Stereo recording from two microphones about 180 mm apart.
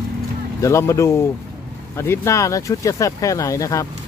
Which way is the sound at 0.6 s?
15° left (ahead or behind).